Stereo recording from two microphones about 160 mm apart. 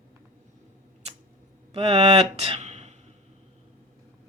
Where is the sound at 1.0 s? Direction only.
40° right (ahead or behind).